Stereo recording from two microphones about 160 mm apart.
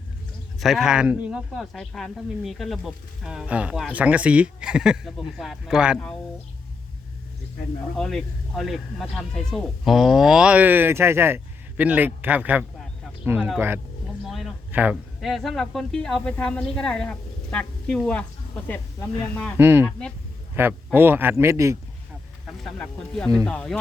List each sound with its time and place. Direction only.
0.6 s a woman's voice: centre (ahead or behind)
7.9 s a woman's voice: 5° left (ahead or behind)
14.3 s a sound: centre (ahead or behind)
14.7 s a woman's voice: 10° right (ahead or behind); by 19.5 s 10° left (ahead or behind)
19.5 s speech: 15° right (ahead or behind)
22.8 s a woman's voice: 5° left (ahead or behind)